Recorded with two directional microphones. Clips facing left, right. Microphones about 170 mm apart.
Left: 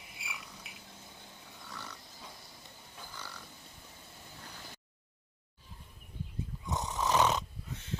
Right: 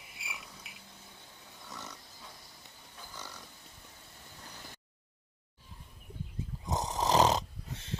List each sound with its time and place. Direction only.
0.0 s insect: centre (ahead or behind)
1.6 s pig: 20° right (ahead or behind)
3.2 s a sound: 15° right (ahead or behind)
6.7 s snoring: 35° right (ahead or behind)